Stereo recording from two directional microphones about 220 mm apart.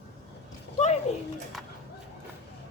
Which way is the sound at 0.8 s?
30° left (ahead or behind).